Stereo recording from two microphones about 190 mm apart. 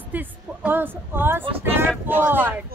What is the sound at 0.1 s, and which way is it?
A woman's voice, 10° right (ahead or behind).